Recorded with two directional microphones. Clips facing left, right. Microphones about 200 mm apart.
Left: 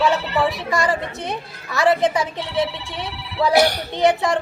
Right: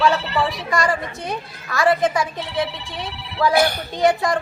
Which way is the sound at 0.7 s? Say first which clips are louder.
Even; 25° left (ahead or behind).